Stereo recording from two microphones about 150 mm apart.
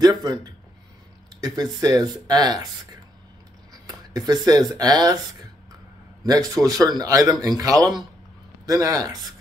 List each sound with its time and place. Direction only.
0.0 s speech: 25° right (ahead or behind)
3.7 s speech: 25° right (ahead or behind)
6.2 s speech: 25° right (ahead or behind)